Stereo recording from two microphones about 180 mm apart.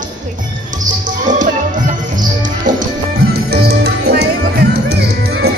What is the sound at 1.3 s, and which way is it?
Music, 45° right (ahead or behind).